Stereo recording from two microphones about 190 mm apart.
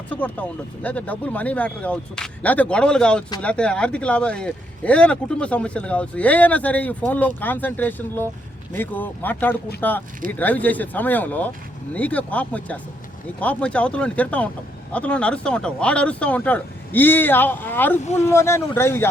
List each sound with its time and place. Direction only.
0.1 s speech: 5° left (ahead or behind)
18.0 s speech: 35° left (ahead or behind)
18.3 s speech: 15° left (ahead or behind)